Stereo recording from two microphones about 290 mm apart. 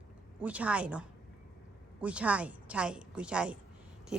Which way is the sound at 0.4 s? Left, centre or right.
Centre.